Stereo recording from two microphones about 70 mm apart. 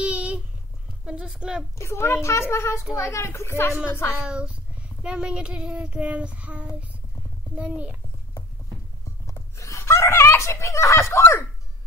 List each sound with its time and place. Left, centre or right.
0.0 s a sound: centre
1.0 s a woman's voice: centre
1.8 s a child's voice: left
4.2 s child singing: centre
7.5 s a child's voice: centre
9.2 s a sound: left